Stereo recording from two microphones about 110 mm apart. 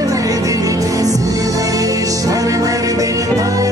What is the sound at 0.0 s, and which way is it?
Music, 30° right (ahead or behind).